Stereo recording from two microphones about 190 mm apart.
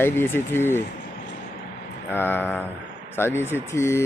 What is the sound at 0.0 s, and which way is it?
Speech, 10° left (ahead or behind).